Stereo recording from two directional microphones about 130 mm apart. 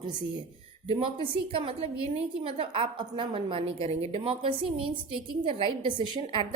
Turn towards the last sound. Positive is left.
turn(degrees=-35)  # may be behind; listen again after turning